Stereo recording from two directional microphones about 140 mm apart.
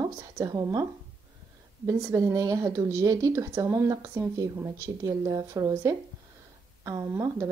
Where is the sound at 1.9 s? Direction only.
20° right (ahead or behind).